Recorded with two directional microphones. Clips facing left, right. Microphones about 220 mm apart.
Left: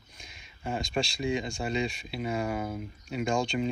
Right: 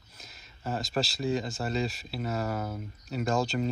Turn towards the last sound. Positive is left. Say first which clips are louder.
# even
turn(degrees=-5)  # may be behind; listen again after turning